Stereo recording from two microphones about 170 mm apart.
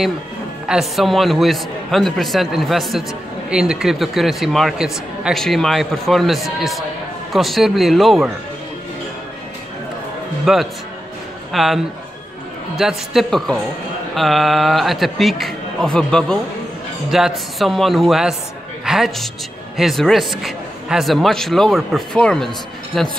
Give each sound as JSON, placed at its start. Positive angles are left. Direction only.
{"t": 0.7, "sound": "a man's voice", "side_deg": 0}
{"t": 10.4, "sound": "a man's voice", "side_deg": 0}